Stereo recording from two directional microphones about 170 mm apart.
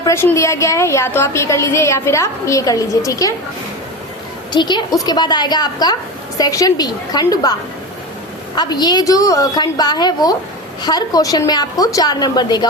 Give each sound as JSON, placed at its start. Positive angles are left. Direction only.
{"t": 0.0, "sound": "a woman's voice", "side_deg": 15}
{"t": 4.5, "sound": "a woman's voice", "side_deg": 25}
{"t": 8.5, "sound": "a woman's voice", "side_deg": 25}